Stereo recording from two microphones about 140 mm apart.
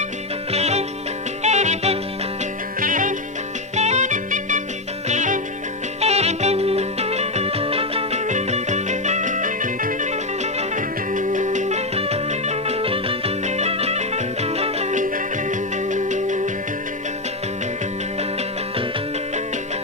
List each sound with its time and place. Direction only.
0.5 s music: 50° right (ahead or behind)
2.8 s music: 70° right (ahead or behind)
3.8 s music: 55° right (ahead or behind)
6.0 s music: 50° right (ahead or behind)
8.3 s music: 55° right (ahead or behind)